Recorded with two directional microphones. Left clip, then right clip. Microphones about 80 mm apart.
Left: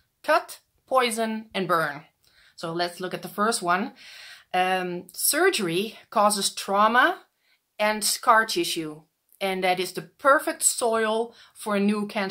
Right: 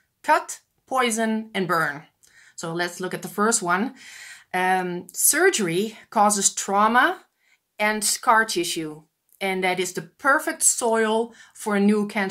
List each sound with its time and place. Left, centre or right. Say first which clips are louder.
0.8 s speech: even; centre
2.5 s speech: right 1 dB; centre; by 12.0 s left